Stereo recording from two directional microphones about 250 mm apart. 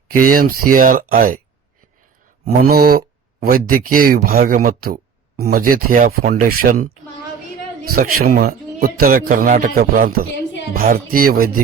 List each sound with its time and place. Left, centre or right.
0.3 s a man's voice: right
2.4 s a man's voice: right
7.9 s a man's voice: right